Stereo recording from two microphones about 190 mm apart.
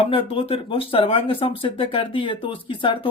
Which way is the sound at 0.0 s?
30° left (ahead or behind).